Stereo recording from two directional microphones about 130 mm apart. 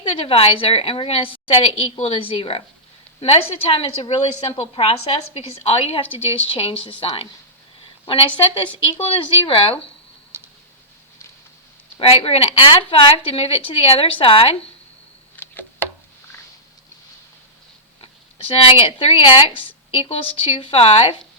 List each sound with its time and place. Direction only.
0.0 s a woman's voice: 45° left (ahead or behind)
11.9 s a woman's voice: 50° left (ahead or behind)
15.4 s a sound: 15° left (ahead or behind)
18.0 s speech: 45° left (ahead or behind)